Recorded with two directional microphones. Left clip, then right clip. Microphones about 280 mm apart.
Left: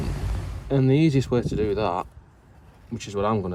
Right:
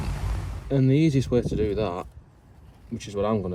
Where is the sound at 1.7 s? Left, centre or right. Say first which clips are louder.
Left 3 dB; left.